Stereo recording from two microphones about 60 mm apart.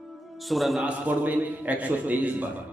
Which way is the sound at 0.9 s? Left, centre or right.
Right.